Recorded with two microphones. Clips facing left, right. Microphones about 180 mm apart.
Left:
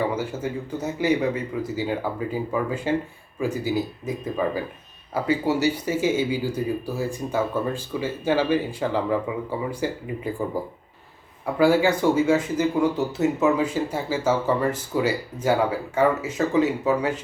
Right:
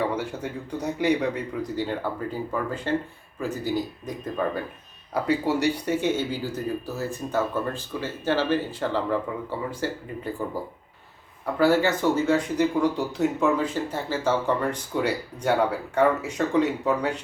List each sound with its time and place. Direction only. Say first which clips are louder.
0.0 s speech: left 2 dB; centre (ahead or behind)